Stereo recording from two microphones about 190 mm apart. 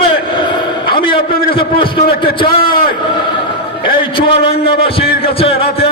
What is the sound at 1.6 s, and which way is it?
A man's voice, 25° left (ahead or behind).